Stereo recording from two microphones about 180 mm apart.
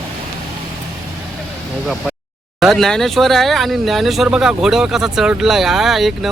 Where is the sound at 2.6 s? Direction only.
Centre (ahead or behind).